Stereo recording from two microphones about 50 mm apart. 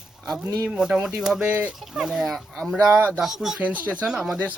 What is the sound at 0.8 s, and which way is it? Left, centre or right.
Speech, centre.